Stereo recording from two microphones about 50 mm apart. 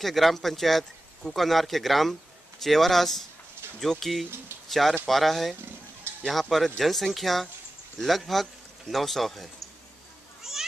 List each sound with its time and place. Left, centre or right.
0.0 s a man's voice: centre
3.6 s a sound: right
4.0 s a man's voice: centre
10.4 s children playing: centre